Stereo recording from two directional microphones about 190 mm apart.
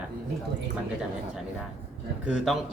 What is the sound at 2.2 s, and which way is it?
Speech, centre (ahead or behind).